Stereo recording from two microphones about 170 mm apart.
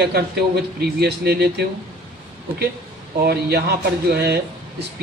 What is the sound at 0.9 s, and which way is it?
Speech, 70° right (ahead or behind).